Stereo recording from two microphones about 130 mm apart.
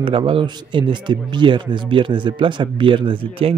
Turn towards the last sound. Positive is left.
turn(degrees=-45)  # may be behind; listen again after turning